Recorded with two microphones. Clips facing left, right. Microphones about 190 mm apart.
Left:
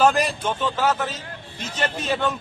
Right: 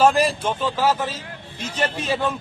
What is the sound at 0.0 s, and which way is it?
A man's voice, 5° right (ahead or behind).